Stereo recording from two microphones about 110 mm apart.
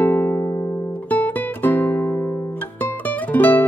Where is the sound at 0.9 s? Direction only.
15° left (ahead or behind).